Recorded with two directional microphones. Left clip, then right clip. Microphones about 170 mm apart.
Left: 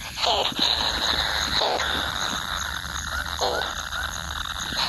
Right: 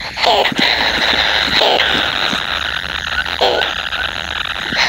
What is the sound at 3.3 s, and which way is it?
Frog, 20° right (ahead or behind).